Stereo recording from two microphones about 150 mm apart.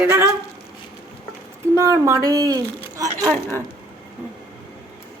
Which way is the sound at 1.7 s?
20° right (ahead or behind).